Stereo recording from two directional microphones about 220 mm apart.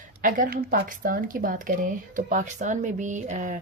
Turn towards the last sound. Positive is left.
turn(degrees=-35)  # may be behind; listen again after turning